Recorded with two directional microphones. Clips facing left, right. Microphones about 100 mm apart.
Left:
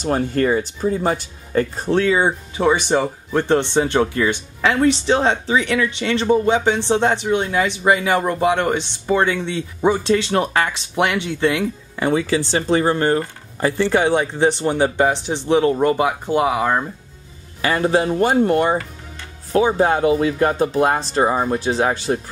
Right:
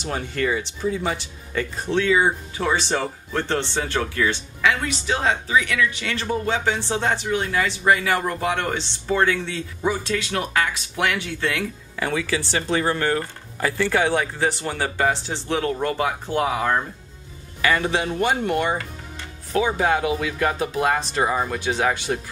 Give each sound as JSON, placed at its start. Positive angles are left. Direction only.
{"t": 0.0, "sound": "speech", "side_deg": 45}
{"t": 4.6, "sound": "speech", "side_deg": 30}
{"t": 17.6, "sound": "speech", "side_deg": 35}